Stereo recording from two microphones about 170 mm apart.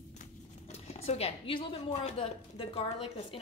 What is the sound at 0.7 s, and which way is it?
A woman's voice, 40° left (ahead or behind).